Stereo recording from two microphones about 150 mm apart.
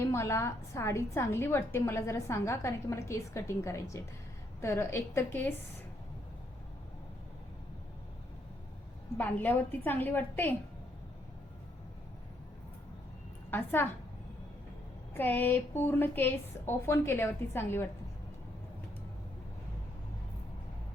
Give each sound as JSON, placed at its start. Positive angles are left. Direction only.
{"t": 0.0, "sound": "a woman's voice", "side_deg": 20}
{"t": 9.1, "sound": "a woman's voice", "side_deg": 10}
{"t": 13.5, "sound": "a woman's voice", "side_deg": 15}
{"t": 15.1, "sound": "a woman's voice", "side_deg": 15}